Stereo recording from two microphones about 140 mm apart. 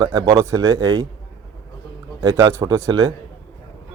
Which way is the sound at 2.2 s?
25° right (ahead or behind).